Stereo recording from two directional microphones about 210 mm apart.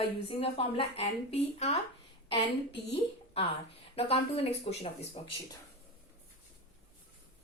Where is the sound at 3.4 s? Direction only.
25° left (ahead or behind).